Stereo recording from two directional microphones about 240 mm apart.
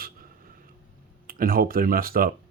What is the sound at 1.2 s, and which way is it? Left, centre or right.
Speech, right.